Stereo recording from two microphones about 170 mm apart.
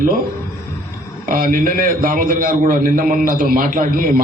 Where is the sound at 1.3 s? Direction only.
55° right (ahead or behind).